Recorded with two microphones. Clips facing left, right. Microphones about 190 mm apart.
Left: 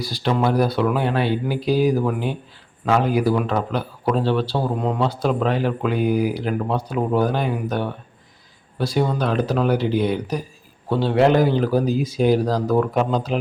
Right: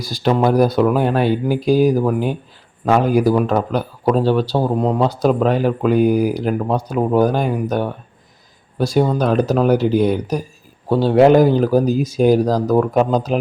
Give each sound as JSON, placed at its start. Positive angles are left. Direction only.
{"t": 0.0, "sound": "speech", "side_deg": -45}